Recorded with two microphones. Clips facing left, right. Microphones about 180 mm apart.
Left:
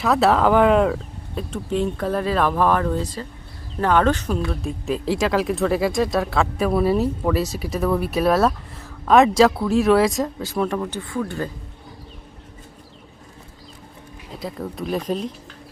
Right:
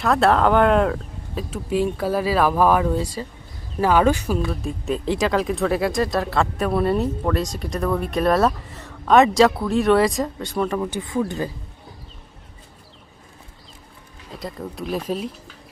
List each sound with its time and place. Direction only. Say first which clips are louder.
0.0 s speech: even; centre (ahead or behind)
10.8 s speech: right 3 dB; 15° right (ahead or behind)
14.3 s speech: left 2 dB; centre (ahead or behind)